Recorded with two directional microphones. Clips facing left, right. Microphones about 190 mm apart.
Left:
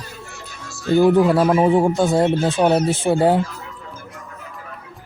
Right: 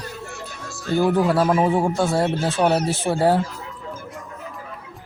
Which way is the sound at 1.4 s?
15° left (ahead or behind).